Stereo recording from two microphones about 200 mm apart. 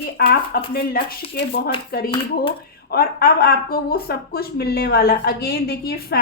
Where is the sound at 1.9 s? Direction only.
50° left (ahead or behind).